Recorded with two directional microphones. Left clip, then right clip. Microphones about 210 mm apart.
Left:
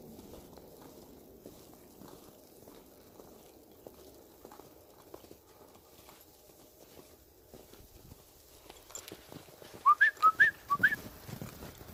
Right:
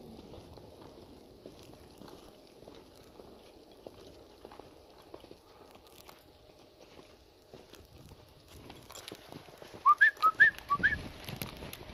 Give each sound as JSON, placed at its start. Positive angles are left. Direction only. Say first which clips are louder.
{"t": 8.9, "sound": "boat", "louder": "right 1 dB", "side_deg": -35}
{"t": 9.8, "sound": "whistling", "louder": "even", "side_deg": 0}